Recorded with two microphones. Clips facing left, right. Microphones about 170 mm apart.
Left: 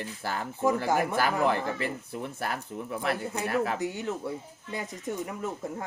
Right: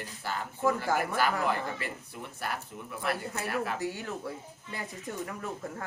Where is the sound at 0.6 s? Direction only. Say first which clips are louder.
Left 3 dB; 20° left (ahead or behind).